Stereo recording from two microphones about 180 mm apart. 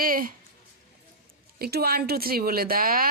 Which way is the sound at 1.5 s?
60° right (ahead or behind).